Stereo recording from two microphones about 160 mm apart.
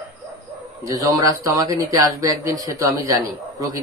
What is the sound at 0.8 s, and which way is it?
Speech, 20° right (ahead or behind).